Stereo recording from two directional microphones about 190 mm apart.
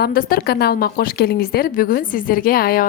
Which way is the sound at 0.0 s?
50° left (ahead or behind).